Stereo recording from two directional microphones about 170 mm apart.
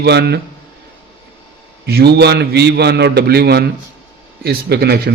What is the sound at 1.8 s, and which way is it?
Mantra, 70° right (ahead or behind).